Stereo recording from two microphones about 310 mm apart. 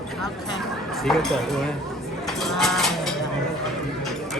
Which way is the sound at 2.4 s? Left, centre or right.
Centre.